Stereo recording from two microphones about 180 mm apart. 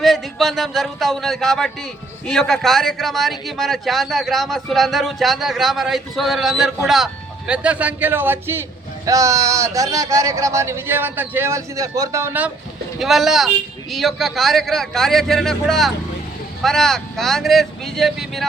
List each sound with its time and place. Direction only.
0.0 s speech: centre (ahead or behind)
13.0 s speech: centre (ahead or behind)